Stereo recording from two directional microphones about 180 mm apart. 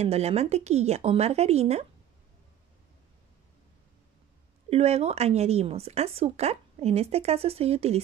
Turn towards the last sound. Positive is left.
turn(degrees=-35)  # may be behind; listen again after turning